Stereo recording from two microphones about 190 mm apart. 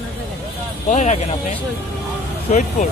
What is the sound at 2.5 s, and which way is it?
Speech, 40° left (ahead or behind).